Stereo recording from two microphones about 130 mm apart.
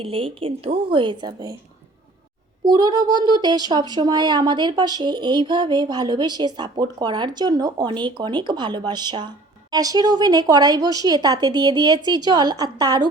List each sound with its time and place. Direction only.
0.0 s speech: 45° right (ahead or behind)
2.6 s speech: 30° right (ahead or behind)